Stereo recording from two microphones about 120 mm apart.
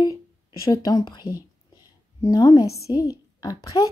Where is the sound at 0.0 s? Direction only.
30° left (ahead or behind).